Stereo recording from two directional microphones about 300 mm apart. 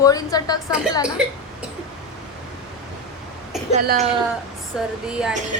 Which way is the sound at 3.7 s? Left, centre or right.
Right.